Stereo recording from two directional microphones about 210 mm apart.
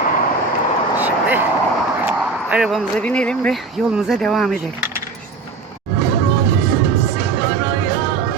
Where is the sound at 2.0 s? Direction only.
5° right (ahead or behind).